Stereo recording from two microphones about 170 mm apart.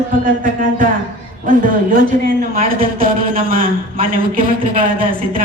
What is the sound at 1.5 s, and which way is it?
A woman's voice, 55° right (ahead or behind).